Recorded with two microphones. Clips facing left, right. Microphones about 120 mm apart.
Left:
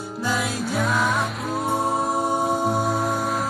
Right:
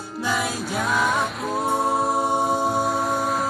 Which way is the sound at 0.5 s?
Centre (ahead or behind).